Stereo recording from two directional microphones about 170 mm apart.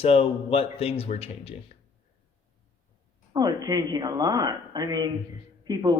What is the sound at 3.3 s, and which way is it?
Speech, 25° right (ahead or behind).